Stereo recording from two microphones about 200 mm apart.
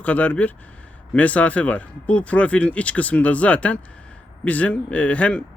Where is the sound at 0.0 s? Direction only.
10° left (ahead or behind).